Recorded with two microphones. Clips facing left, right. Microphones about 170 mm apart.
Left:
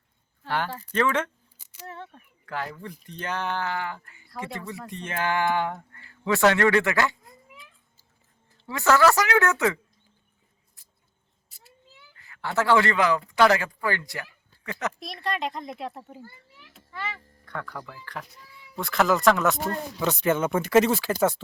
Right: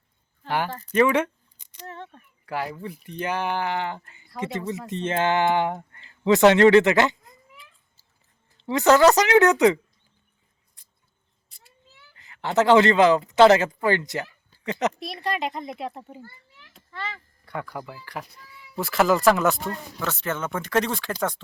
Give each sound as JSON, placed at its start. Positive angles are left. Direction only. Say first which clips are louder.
{"t": 0.4, "sound": "speech", "louder": "right 2 dB", "side_deg": -10}
{"t": 0.7, "sound": "speech", "louder": "right 1 dB", "side_deg": 10}
{"t": 0.9, "sound": "speech", "louder": "right 5 dB", "side_deg": -10}
{"t": 1.5, "sound": "a sound", "louder": "even", "side_deg": 5}
{"t": 2.5, "sound": "a woman's voice", "louder": "right 3 dB", "side_deg": -10}
{"t": 8.5, "sound": "a woman's voice", "louder": "right 4 dB", "side_deg": -20}
{"t": 10.8, "sound": "mouse", "louder": "even", "side_deg": 5}
{"t": 11.4, "sound": "a sound", "louder": "left 2 dB", "side_deg": 5}
{"t": 12.1, "sound": "speech", "louder": "right 5 dB", "side_deg": -20}
{"t": 14.9, "sound": "speech", "louder": "right 2 dB", "side_deg": 0}
{"t": 16.2, "sound": "a sound", "louder": "even", "side_deg": 10}
{"t": 17.4, "sound": "speech", "louder": "right 3 dB", "side_deg": -10}
{"t": 20.0, "sound": "speech", "louder": "left 6 dB", "side_deg": 15}